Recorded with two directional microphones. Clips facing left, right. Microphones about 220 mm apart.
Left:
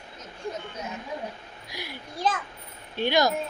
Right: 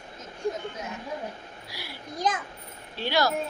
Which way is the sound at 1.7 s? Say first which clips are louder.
Left 1 dB; 20° left (ahead or behind).